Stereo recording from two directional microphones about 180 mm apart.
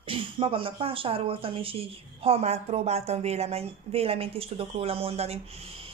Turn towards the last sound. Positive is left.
turn(degrees=-35)  # may be behind; listen again after turning